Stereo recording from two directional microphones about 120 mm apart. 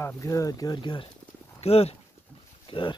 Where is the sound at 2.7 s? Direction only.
45° left (ahead or behind).